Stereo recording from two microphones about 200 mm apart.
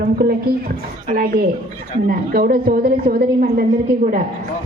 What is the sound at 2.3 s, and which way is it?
A woman's voice, 50° right (ahead or behind).